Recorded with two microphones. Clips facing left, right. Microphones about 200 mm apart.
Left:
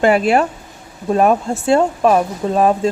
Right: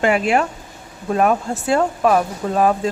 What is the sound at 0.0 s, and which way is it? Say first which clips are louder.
Speech: left 4 dB; 35° left (ahead or behind).